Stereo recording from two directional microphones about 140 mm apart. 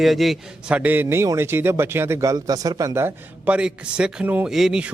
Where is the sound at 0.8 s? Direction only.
15° right (ahead or behind).